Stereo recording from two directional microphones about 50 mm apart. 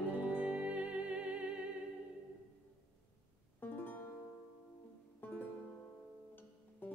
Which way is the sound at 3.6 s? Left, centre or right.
Left.